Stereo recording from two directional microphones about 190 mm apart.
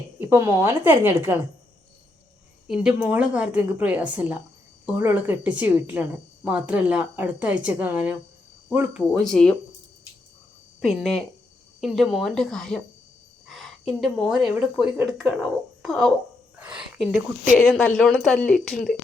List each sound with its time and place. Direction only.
0.2 s speech: 10° right (ahead or behind)
2.6 s speech: 5° right (ahead or behind)
9.2 s a woman's voice: 5° left (ahead or behind)
10.8 s a woman's voice: centre (ahead or behind)